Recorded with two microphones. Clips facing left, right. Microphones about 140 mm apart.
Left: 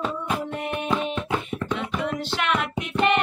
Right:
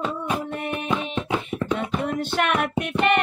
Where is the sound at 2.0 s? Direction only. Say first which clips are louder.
Right 3 dB; 55° right (ahead or behind).